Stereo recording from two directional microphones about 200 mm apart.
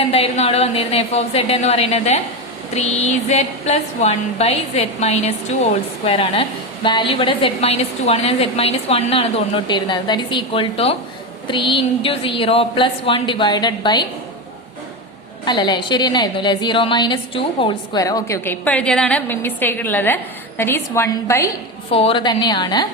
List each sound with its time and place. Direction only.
0.1 s a woman's voice: 30° left (ahead or behind)
15.4 s a woman's voice: 20° left (ahead or behind)
21.9 s a woman's voice: 25° left (ahead or behind)